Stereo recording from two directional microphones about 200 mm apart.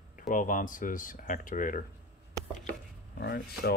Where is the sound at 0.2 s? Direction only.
40° left (ahead or behind).